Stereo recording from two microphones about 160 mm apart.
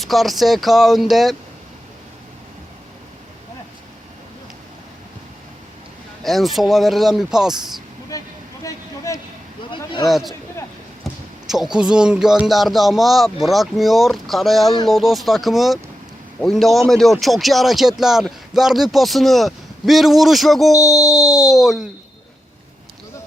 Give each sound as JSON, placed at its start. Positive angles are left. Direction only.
{"t": 0.0, "sound": "speech", "side_deg": 0}
{"t": 6.2, "sound": "speech", "side_deg": 0}
{"t": 8.1, "sound": "vehicle", "side_deg": 20}
{"t": 9.7, "sound": "a sound", "side_deg": 30}
{"t": 10.1, "sound": "speech", "side_deg": 0}
{"t": 20.7, "sound": "speech", "side_deg": 20}
{"t": 21.3, "sound": "speech", "side_deg": 0}